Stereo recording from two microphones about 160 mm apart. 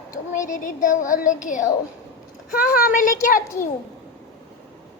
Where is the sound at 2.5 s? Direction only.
65° left (ahead or behind).